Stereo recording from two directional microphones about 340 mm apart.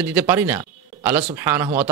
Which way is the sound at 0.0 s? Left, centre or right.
Centre.